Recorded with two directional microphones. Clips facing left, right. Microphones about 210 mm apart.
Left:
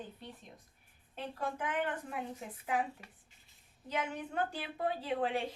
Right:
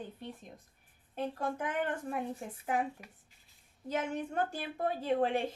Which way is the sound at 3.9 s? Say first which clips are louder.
Right 3 dB; 45° right (ahead or behind).